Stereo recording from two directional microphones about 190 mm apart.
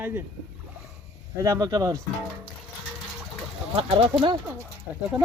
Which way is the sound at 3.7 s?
25° right (ahead or behind).